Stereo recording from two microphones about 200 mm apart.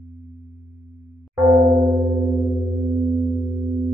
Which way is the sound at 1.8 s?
35° right (ahead or behind).